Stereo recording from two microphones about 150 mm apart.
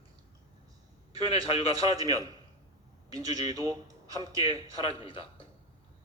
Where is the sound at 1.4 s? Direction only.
25° right (ahead or behind).